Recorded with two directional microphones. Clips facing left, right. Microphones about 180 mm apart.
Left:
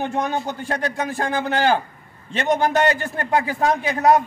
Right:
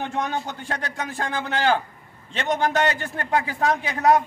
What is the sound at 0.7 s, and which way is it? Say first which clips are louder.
Speech: left 6 dB; 45° left (ahead or behind).